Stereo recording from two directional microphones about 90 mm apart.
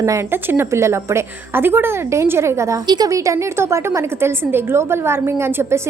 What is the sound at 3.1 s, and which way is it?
A woman's voice, 35° right (ahead or behind).